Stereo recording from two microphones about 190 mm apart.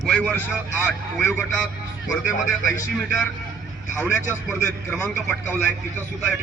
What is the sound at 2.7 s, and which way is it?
Speech, 15° left (ahead or behind).